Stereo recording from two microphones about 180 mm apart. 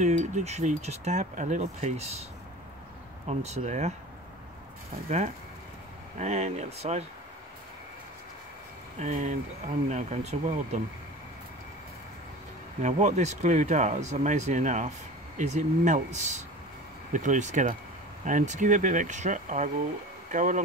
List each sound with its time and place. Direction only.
0.0 s speech: 40° right (ahead or behind)
3.3 s speech: 35° right (ahead or behind)
6.1 s speech: 40° right (ahead or behind)
9.0 s speech: 40° right (ahead or behind)
12.8 s speech: 40° right (ahead or behind)